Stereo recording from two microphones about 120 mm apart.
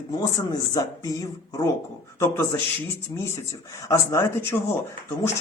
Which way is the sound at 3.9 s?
25° left (ahead or behind).